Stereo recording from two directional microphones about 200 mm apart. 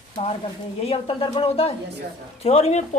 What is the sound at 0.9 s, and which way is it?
Speech, 25° left (ahead or behind).